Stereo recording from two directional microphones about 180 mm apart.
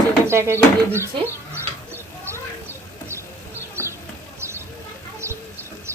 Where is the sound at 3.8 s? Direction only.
10° left (ahead or behind).